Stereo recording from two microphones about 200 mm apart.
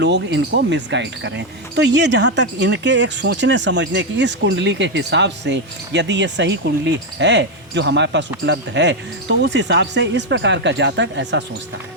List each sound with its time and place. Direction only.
0.0 s speech: 60° right (ahead or behind)